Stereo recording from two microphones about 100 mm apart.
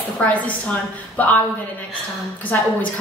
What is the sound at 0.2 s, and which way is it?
A woman's voice, 10° left (ahead or behind).